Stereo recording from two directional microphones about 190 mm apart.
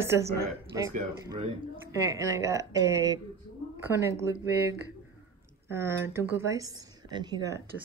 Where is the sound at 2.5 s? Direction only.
20° right (ahead or behind).